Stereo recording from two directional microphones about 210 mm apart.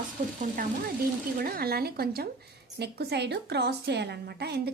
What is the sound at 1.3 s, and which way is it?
A woman's voice, 45° right (ahead or behind).